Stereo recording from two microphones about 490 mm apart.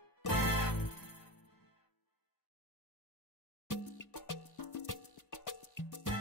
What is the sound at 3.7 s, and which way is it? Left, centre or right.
Music, left.